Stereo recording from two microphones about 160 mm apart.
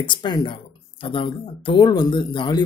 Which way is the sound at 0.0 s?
30° left (ahead or behind).